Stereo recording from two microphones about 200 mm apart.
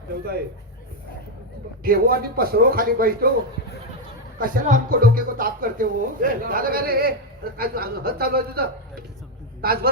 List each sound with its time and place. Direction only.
1.8 s speech: 45° right (ahead or behind)
4.4 s a man's voice: 45° right (ahead or behind)